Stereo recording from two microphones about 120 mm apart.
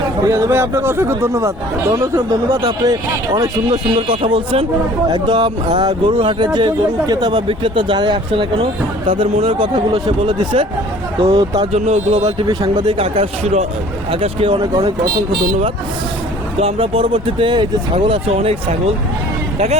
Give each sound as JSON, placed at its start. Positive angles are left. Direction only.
{"t": 0.3, "sound": "speech", "side_deg": -25}
{"t": 2.5, "sound": "speech", "side_deg": -35}
{"t": 11.7, "sound": "speech", "side_deg": -60}
{"t": 12.2, "sound": "speech", "side_deg": -40}
{"t": 16.6, "sound": "speech", "side_deg": -50}